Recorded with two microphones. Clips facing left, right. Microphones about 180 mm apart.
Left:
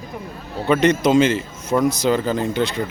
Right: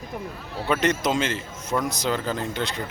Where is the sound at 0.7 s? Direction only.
Centre (ahead or behind).